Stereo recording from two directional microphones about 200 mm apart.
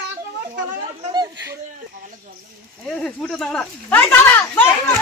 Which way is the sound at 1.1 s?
20° right (ahead or behind).